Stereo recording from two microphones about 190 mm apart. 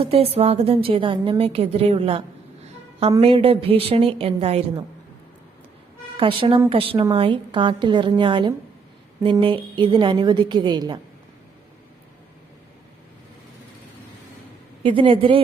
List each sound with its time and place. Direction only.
0.0 s a woman's voice: 30° right (ahead or behind)
6.1 s a woman's voice: 25° right (ahead or behind)
14.8 s a woman's voice: 30° right (ahead or behind)